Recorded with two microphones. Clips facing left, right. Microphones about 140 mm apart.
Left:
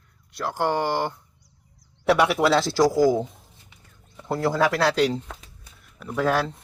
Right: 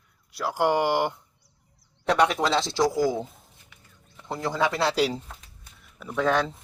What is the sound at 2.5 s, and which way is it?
Speech, 20° right (ahead or behind).